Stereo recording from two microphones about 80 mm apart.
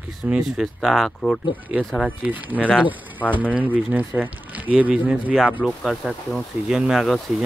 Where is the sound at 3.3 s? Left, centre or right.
Centre.